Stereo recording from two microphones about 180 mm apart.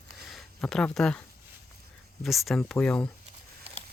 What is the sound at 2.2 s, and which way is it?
Speech, centre (ahead or behind).